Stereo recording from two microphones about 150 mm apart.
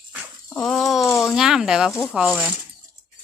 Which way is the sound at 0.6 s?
Centre (ahead or behind).